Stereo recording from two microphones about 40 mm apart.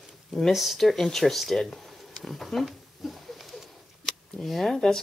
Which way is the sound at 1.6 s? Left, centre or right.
Centre.